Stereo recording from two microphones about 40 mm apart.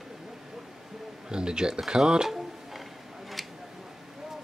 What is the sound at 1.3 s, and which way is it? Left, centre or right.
Speech, centre.